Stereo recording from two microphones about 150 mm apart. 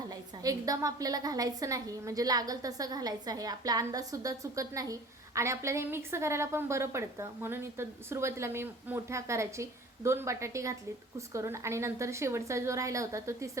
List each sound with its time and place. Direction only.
0.1 s a woman's voice: 25° right (ahead or behind)